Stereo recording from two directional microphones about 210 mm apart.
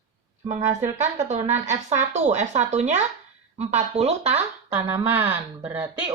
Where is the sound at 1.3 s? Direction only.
35° right (ahead or behind).